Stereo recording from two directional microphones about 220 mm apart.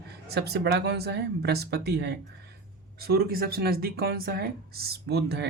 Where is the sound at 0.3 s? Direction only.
50° right (ahead or behind).